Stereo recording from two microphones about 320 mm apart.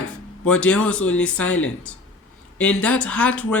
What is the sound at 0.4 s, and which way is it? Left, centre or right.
A man's voice, centre.